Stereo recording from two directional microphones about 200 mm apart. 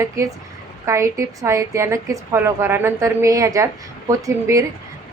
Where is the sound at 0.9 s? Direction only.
15° right (ahead or behind).